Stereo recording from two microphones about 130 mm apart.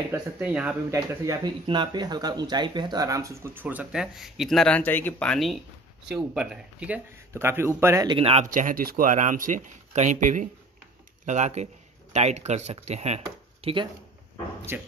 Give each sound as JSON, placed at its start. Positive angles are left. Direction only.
{"t": 0.1, "sound": "speech", "side_deg": -10}
{"t": 0.9, "sound": "a man's voice", "side_deg": -25}
{"t": 1.7, "sound": "speech", "side_deg": -35}
{"t": 7.3, "sound": "a man's voice", "side_deg": -20}
{"t": 8.1, "sound": "speech", "side_deg": -45}
{"t": 8.5, "sound": "speech", "side_deg": -90}
{"t": 11.2, "sound": "speech", "side_deg": -65}
{"t": 14.7, "sound": "a man's voice", "side_deg": -20}